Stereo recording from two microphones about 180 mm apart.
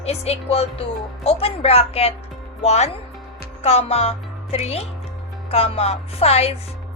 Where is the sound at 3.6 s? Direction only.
35° left (ahead or behind).